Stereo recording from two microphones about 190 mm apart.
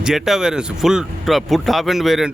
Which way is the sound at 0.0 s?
5° right (ahead or behind).